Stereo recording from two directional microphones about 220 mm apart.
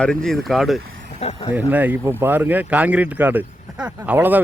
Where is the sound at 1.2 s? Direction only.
30° left (ahead or behind).